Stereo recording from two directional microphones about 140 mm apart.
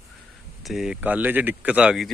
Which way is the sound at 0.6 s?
Centre (ahead or behind).